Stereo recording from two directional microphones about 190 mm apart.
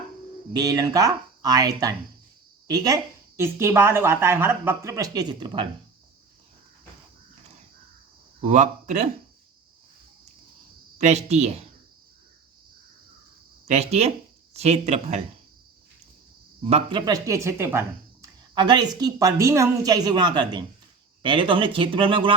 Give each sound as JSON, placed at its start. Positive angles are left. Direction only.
{"t": 0.5, "sound": "a woman's voice", "side_deg": -20}
{"t": 8.4, "sound": "speech", "side_deg": -40}
{"t": 10.9, "sound": "speech", "side_deg": -35}
{"t": 13.7, "sound": "speech", "side_deg": -35}
{"t": 16.6, "sound": "speech", "side_deg": -30}
{"t": 17.1, "sound": "speech", "side_deg": -15}
{"t": 18.5, "sound": "speech", "side_deg": -25}